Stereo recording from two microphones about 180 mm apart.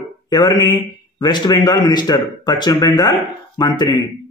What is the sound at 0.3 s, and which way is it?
A man's voice, 20° left (ahead or behind).